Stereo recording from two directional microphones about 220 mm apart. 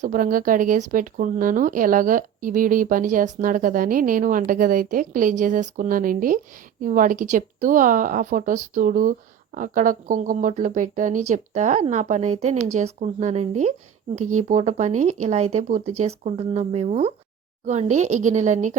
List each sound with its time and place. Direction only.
0.0 s speech: 40° right (ahead or behind)